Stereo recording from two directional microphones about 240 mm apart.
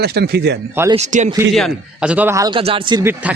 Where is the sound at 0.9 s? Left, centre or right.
Right.